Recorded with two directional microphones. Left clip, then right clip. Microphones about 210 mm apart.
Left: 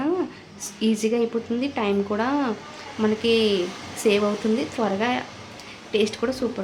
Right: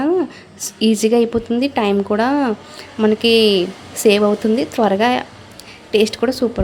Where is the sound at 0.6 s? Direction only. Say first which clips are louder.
Right 8 dB; 30° right (ahead or behind).